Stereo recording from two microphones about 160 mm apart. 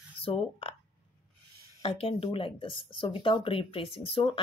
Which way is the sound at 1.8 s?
35° left (ahead or behind).